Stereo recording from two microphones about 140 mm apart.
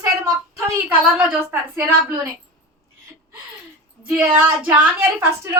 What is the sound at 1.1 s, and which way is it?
A woman's voice, 10° right (ahead or behind).